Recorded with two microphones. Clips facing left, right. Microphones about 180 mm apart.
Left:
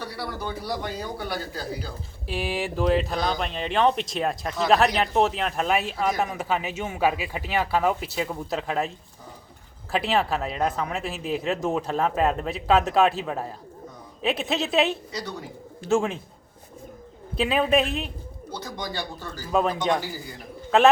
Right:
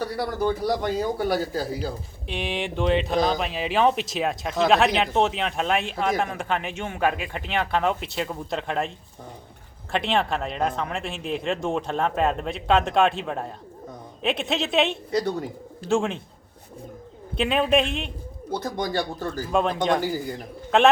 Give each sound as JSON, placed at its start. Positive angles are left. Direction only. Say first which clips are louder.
{"t": 0.0, "sound": "a man's voice", "louder": "right 7 dB", "side_deg": -45}
{"t": 2.2, "sound": "speech", "louder": "left 1 dB", "side_deg": 5}
{"t": 9.9, "sound": "speech", "louder": "even", "side_deg": 5}
{"t": 15.1, "sound": "a man's voice", "louder": "right 9 dB", "side_deg": -50}
{"t": 15.9, "sound": "speech", "louder": "even", "side_deg": 0}
{"t": 17.3, "sound": "speech", "louder": "even", "side_deg": 0}
{"t": 18.5, "sound": "a man's voice", "louder": "right 7 dB", "side_deg": -55}
{"t": 19.5, "sound": "speech", "louder": "even", "side_deg": 5}